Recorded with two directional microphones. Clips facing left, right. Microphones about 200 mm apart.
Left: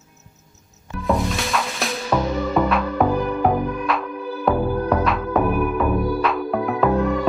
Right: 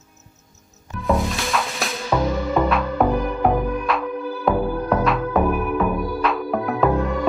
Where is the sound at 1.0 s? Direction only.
Centre (ahead or behind).